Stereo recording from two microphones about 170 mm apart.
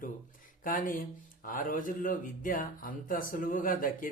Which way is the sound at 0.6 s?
50° left (ahead or behind).